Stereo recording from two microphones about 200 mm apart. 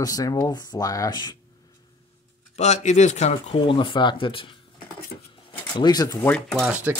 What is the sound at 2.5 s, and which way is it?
Speech, 35° left (ahead or behind).